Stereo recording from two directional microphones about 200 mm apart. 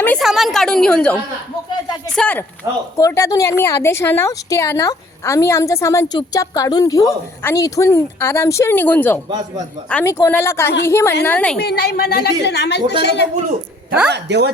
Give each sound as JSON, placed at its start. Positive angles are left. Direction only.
{"t": 0.0, "sound": "a woman's voice", "side_deg": 5}
{"t": 2.6, "sound": "speech", "side_deg": -15}
{"t": 3.0, "sound": "a woman's voice", "side_deg": 15}
{"t": 11.6, "sound": "a woman's voice", "side_deg": 50}
{"t": 14.1, "sound": "speech", "side_deg": -60}